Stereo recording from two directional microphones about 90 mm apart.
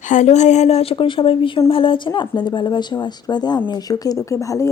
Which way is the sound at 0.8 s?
80° left.